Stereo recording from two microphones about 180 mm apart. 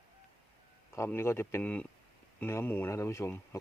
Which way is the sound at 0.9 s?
15° left (ahead or behind).